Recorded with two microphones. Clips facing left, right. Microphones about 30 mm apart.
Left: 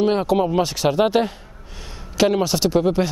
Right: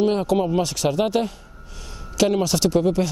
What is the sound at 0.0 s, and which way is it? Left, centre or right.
Speech, centre.